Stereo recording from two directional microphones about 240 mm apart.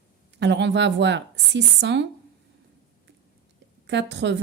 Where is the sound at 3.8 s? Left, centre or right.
Right.